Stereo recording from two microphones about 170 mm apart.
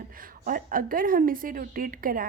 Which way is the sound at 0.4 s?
55° right (ahead or behind).